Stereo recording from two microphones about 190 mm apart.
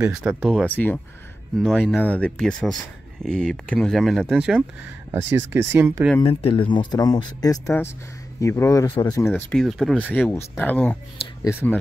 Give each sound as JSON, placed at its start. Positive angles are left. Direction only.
{"t": 0.0, "sound": "speech", "side_deg": -15}
{"t": 0.5, "sound": "speech", "side_deg": 5}
{"t": 6.2, "sound": "speech", "side_deg": 30}